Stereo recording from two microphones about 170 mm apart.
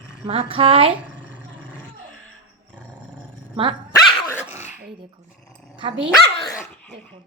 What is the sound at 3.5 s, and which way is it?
Speech, 30° right (ahead or behind).